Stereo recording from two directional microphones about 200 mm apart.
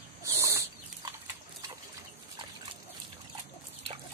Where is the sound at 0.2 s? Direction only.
15° right (ahead or behind).